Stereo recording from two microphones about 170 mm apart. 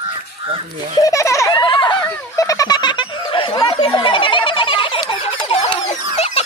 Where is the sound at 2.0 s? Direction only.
15° left (ahead or behind).